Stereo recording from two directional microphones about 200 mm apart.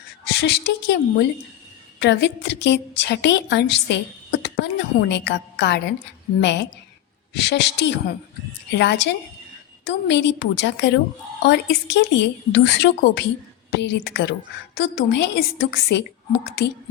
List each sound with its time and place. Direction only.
0.3 s a woman's voice: 55° left (ahead or behind)